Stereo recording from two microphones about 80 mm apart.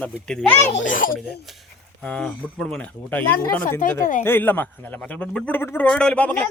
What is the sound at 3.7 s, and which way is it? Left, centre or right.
Speech, left.